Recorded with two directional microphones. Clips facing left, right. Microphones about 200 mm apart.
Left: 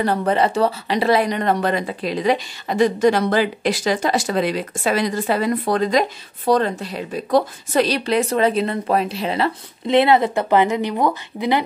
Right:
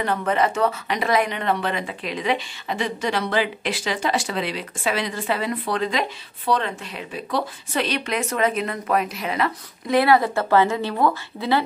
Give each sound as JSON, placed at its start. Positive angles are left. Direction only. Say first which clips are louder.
{"t": 0.0, "sound": "speech", "louder": "left 3 dB", "side_deg": 35}